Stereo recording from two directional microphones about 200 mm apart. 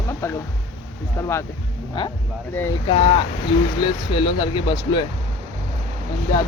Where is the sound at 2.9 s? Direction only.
25° left (ahead or behind).